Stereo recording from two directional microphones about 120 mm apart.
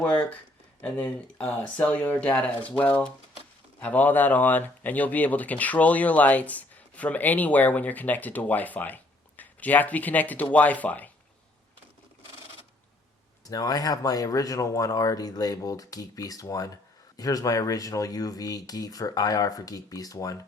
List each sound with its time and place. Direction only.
0.0 s speech: 10° left (ahead or behind)
13.5 s speech: 30° left (ahead or behind)